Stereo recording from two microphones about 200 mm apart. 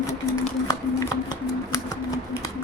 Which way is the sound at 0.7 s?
15° left (ahead or behind).